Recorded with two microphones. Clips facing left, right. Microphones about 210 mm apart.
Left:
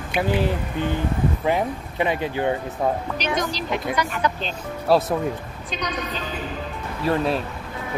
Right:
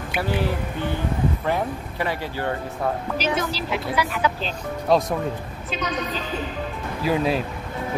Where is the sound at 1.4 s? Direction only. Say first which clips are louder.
Left 2 dB; 20° left (ahead or behind).